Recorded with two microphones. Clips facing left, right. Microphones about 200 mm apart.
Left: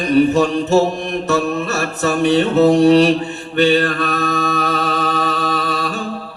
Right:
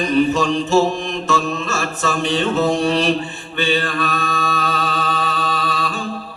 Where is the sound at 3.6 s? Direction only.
65° left (ahead or behind).